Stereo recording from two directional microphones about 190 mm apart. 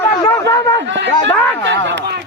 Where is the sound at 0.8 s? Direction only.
70° right (ahead or behind).